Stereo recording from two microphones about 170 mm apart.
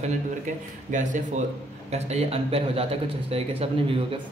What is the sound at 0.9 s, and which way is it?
A man's voice, 45° right (ahead or behind).